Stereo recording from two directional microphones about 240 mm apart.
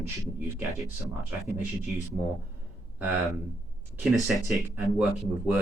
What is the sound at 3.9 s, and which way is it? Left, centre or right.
Speech, centre.